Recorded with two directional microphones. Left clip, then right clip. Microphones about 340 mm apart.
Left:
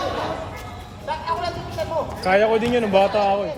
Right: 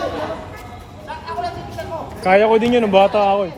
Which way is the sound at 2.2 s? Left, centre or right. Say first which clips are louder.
Right 5 dB; centre.